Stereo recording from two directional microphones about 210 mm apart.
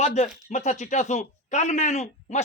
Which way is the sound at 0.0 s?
30° left (ahead or behind).